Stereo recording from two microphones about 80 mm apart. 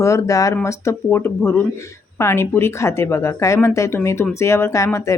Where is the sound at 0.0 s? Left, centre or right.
Left.